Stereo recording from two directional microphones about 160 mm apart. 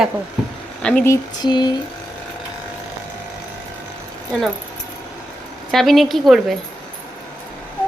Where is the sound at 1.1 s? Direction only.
25° left (ahead or behind).